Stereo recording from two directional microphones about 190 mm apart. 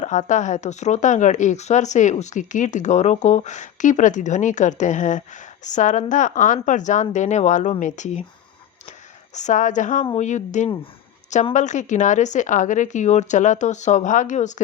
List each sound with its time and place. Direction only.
0.0 s speech: 40° left (ahead or behind)